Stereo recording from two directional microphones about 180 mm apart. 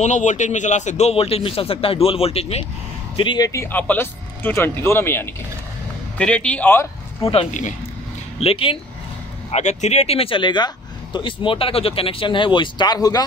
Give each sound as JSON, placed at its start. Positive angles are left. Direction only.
{"t": 0.0, "sound": "a man's voice", "side_deg": 40}
{"t": 7.2, "sound": "a man's voice", "side_deg": 40}